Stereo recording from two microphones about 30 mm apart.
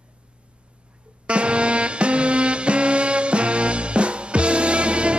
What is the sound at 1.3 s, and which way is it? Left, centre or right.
Music, right.